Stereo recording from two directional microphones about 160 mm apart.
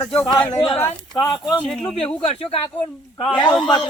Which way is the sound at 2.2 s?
35° left (ahead or behind).